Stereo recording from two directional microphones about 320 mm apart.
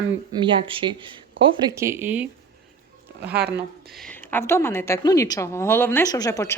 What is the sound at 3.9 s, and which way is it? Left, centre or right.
A woman's voice, centre.